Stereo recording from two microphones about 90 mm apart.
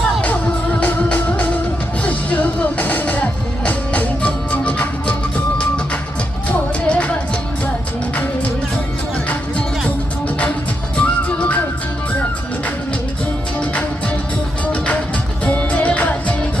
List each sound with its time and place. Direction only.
0.0 s music: 10° left (ahead or behind)
10.9 s music: 15° left (ahead or behind)
15.4 s music: 15° left (ahead or behind)